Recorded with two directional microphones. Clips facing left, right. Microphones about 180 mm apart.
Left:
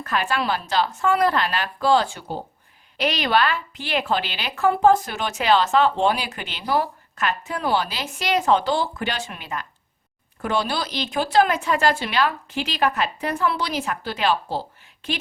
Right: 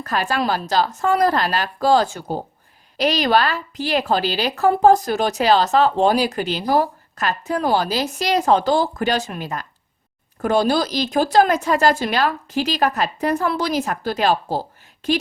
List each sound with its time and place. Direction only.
0.0 s a woman's voice: 40° right (ahead or behind)